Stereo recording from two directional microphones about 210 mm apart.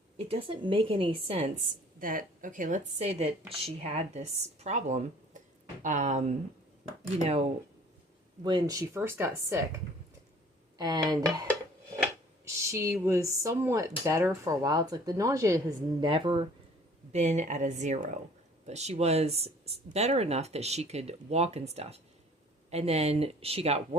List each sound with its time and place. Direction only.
0.3 s speech: 25° right (ahead or behind)
2.0 s a woman's voice: 40° right (ahead or behind)
8.4 s speech: 20° right (ahead or behind)
12.7 s speech: 15° right (ahead or behind)
17.1 s a woman's voice: 35° right (ahead or behind)